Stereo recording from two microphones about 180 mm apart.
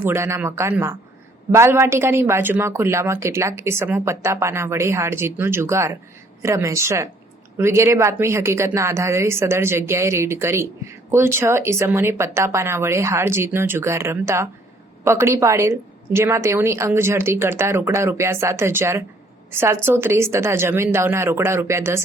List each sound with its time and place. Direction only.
0.0 s a woman's voice: 15° right (ahead or behind)